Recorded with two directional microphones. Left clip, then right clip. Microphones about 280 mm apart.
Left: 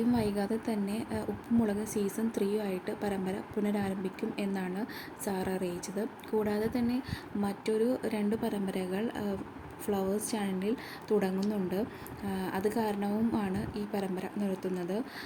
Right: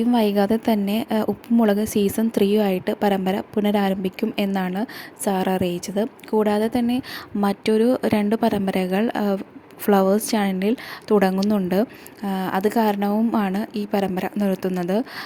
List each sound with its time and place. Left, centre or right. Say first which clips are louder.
0.1 s a woman's voice: right 12 dB; right